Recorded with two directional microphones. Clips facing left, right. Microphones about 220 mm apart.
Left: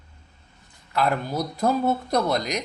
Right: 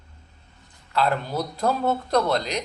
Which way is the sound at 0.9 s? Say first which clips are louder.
Even; 10° left (ahead or behind).